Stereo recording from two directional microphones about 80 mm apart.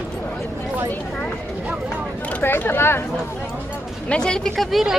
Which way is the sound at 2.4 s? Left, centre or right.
Left.